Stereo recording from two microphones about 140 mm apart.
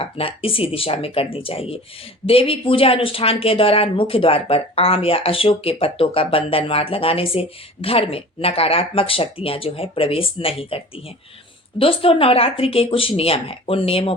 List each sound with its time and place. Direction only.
0.0 s speech: 40° left (ahead or behind)